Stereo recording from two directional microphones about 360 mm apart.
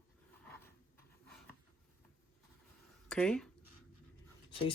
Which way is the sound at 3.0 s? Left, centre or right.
Centre.